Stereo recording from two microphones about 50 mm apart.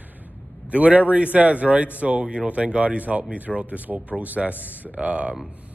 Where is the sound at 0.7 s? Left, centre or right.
Right.